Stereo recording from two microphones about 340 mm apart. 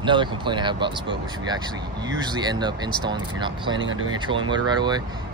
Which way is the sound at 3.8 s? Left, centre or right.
Right.